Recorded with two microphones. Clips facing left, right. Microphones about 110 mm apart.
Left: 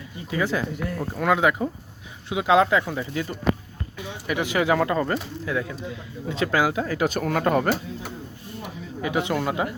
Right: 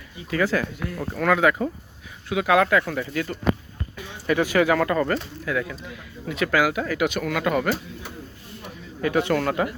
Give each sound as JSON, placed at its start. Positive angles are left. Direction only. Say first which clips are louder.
{"t": 0.3, "sound": "speech", "louder": "right 2 dB", "side_deg": 20}
{"t": 8.6, "sound": "speech", "louder": "right 3 dB", "side_deg": 15}